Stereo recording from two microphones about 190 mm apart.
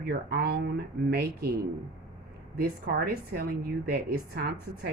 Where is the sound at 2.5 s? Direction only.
55° right (ahead or behind).